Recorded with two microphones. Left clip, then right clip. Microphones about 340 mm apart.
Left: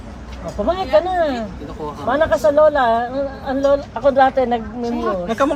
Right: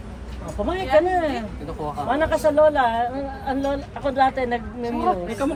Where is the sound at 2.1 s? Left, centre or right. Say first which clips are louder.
Left 5 dB; centre.